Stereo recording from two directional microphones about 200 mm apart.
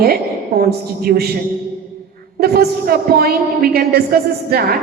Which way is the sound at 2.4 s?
50° right (ahead or behind).